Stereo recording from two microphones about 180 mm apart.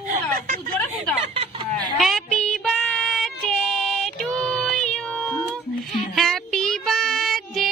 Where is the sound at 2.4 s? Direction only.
5° left (ahead or behind).